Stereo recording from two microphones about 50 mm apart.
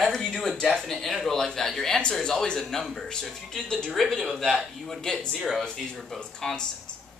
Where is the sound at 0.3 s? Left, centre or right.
Centre.